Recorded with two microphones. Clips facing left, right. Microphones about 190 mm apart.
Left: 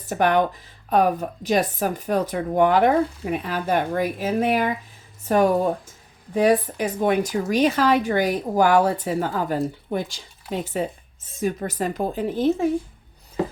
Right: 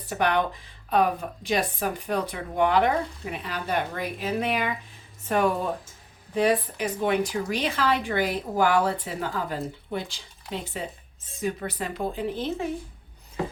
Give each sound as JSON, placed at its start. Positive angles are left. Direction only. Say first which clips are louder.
{"t": 0.1, "sound": "speech", "louder": "left 5 dB", "side_deg": 45}